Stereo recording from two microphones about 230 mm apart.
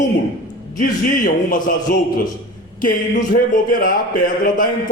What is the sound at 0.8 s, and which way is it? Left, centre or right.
Speech, left.